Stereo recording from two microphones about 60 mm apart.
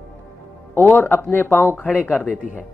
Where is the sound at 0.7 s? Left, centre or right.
Left.